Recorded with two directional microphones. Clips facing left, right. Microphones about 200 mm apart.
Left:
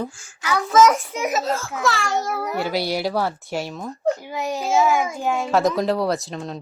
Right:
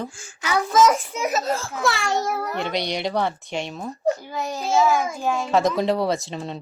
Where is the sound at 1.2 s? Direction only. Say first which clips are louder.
Left 2 dB; 15° left (ahead or behind); by 3.9 s centre (ahead or behind).